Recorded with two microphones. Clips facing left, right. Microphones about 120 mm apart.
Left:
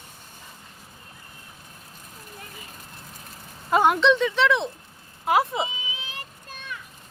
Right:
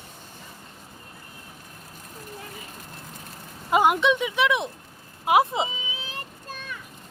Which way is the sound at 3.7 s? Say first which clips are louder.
Left 1 dB; 10° right (ahead or behind).